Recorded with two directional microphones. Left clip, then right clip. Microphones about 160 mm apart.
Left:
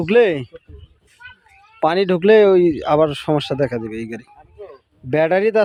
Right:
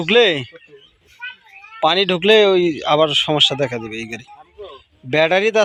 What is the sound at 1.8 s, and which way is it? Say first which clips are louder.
Speech: right 1 dB; 45° left (ahead or behind).